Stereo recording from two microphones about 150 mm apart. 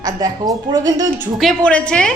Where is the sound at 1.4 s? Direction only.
5° left (ahead or behind).